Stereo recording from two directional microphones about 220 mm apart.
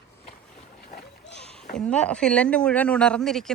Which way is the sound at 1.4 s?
Centre (ahead or behind).